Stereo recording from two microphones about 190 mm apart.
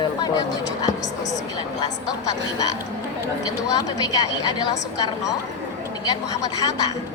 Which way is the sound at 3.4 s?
20° left (ahead or behind).